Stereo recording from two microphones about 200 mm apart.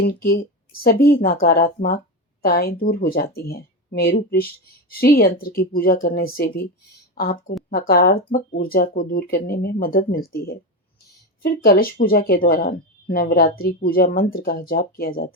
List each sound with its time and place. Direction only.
0.0 s speech: 50° left (ahead or behind)